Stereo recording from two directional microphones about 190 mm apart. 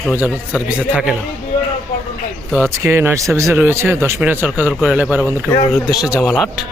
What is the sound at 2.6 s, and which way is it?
Speech, 10° right (ahead or behind).